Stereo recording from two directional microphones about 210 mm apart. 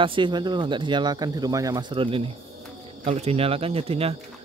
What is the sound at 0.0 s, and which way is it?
Speech, 25° right (ahead or behind).